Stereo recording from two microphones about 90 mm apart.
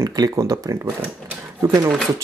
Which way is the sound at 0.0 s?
45° right (ahead or behind).